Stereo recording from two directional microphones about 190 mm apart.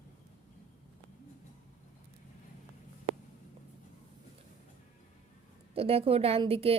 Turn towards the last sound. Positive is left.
turn(degrees=-30)  # may be behind; listen again after turning